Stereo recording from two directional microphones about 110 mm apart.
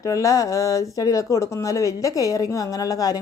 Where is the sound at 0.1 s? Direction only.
30° left (ahead or behind).